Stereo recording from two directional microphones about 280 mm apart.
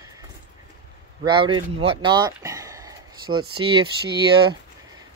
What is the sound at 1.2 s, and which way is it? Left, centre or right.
Speech, centre.